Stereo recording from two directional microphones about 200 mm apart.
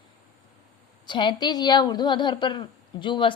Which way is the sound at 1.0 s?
25° left (ahead or behind).